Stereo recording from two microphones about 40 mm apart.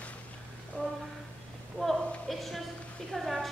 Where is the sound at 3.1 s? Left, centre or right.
Centre.